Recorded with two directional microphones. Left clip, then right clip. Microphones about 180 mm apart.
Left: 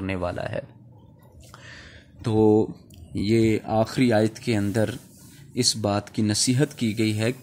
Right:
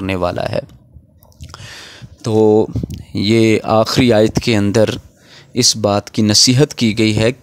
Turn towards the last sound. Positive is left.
turn(degrees=-55)  # may be behind; listen again after turning